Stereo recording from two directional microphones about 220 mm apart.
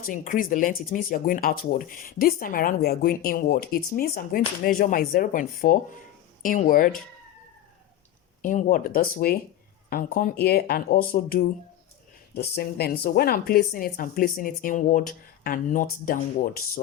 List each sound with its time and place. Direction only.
0.0 s speech: 40° left (ahead or behind)
8.4 s speech: 35° left (ahead or behind)